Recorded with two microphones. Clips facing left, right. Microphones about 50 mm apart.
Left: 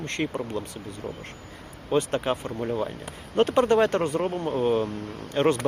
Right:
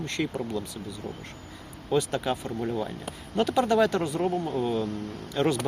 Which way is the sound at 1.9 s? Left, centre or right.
Left.